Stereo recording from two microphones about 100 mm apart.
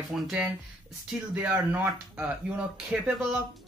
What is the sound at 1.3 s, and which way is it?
Speech, 20° right (ahead or behind).